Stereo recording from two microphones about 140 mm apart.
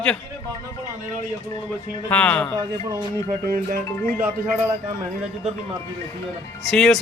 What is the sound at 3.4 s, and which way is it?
Speech, 90° right.